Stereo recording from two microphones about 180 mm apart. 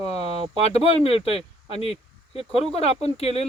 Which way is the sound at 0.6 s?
35° left (ahead or behind).